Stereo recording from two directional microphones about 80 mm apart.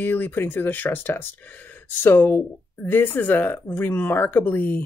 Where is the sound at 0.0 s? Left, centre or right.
Left.